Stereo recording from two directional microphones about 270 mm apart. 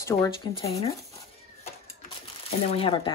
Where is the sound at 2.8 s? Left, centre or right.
Centre.